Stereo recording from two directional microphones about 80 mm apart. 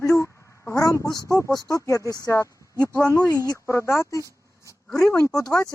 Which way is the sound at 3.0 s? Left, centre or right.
Right.